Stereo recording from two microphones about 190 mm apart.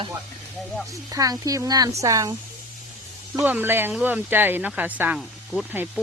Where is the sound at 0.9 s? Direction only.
20° right (ahead or behind).